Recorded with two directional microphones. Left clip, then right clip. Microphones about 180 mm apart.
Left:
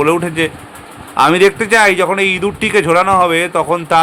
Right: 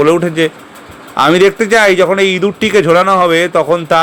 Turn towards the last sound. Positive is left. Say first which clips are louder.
# right 2 dB
turn(degrees=-10)  # may be behind; listen again after turning